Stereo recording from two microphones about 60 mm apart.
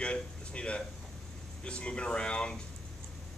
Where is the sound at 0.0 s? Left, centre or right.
Centre.